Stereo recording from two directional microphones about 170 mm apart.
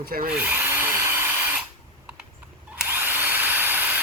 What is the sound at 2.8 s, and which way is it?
Drill, 10° right (ahead or behind).